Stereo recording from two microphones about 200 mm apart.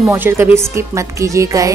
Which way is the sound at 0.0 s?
15° right (ahead or behind).